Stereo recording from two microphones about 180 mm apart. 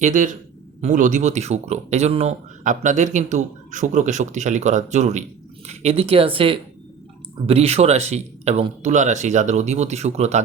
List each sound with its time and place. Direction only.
0.0 s a man's voice: 45° right (ahead or behind)